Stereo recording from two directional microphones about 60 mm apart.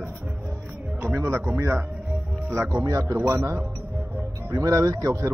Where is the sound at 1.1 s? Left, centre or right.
Right.